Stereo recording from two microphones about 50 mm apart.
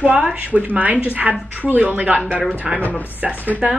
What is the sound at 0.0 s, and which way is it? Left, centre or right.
Speech, centre.